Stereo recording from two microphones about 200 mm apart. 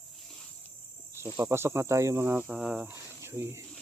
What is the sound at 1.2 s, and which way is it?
Speech, 10° right (ahead or behind).